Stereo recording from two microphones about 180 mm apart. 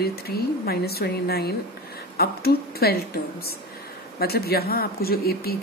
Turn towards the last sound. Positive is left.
turn(degrees=60)  # may be behind; listen again after turning